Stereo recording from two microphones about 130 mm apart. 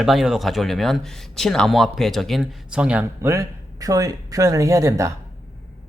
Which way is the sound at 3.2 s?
20° right (ahead or behind).